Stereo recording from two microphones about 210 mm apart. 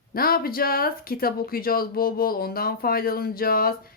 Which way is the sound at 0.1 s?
45° left (ahead or behind).